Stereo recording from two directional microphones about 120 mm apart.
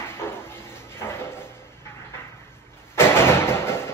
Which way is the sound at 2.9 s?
20° left (ahead or behind).